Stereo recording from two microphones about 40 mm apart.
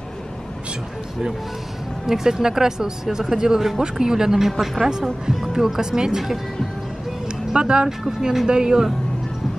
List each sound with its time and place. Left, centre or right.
2.0 s speech: centre
7.5 s speech: right